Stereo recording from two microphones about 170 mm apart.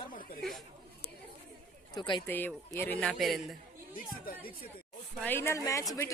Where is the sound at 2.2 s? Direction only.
10° left (ahead or behind).